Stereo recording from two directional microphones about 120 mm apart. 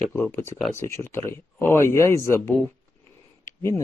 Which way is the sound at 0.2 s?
20° left (ahead or behind).